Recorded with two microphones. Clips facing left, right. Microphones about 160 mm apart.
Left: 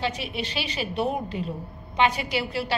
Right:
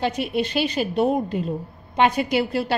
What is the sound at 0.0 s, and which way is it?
A woman's voice, 45° right (ahead or behind).